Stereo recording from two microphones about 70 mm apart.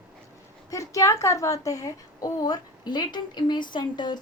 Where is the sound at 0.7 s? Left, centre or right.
Left.